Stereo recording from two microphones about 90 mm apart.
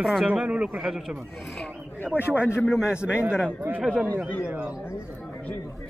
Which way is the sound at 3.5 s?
15° right (ahead or behind).